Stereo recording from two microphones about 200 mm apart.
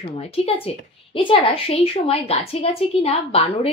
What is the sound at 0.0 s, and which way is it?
A woman's voice, 30° left (ahead or behind).